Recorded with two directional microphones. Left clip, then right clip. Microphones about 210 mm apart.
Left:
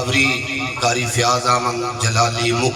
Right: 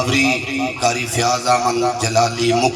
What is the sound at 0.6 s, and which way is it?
Music, 30° right (ahead or behind).